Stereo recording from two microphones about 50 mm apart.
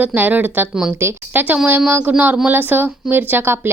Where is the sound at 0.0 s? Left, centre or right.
Right.